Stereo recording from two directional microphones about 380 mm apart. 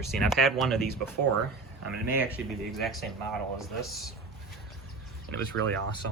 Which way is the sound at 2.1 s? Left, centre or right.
Centre.